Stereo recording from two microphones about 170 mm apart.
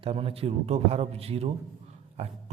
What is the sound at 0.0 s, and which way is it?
Speech, 35° right (ahead or behind).